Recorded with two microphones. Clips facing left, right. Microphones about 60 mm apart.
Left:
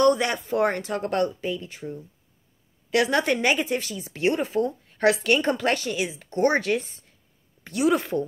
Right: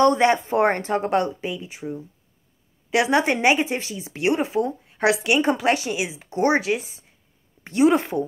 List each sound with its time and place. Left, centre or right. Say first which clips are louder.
0.0 s speech: right 3 dB; right; by 7.2 s centre
7.6 s a woman's voice: right 4 dB; right